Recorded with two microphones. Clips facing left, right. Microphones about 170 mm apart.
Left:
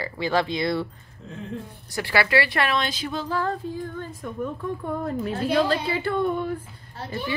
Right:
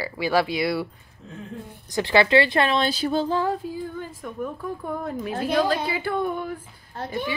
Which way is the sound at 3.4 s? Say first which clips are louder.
Right 2 dB; 5° right (ahead or behind).